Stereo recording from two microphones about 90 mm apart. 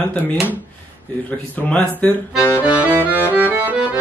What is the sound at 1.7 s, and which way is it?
Speech, 10° left (ahead or behind).